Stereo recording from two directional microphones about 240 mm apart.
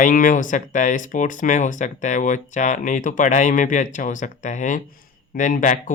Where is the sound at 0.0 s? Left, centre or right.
Left.